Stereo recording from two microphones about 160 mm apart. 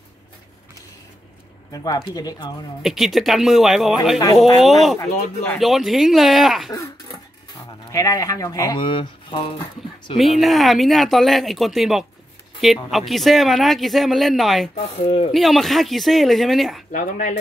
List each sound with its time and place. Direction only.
1.7 s speech: 25° left (ahead or behind)
2.8 s speech: centre (ahead or behind)
7.9 s speech: 20° left (ahead or behind)
10.1 s speech: centre (ahead or behind)
14.8 s speech: 35° left (ahead or behind)
15.3 s speech: centre (ahead or behind)
16.9 s speech: 55° left (ahead or behind)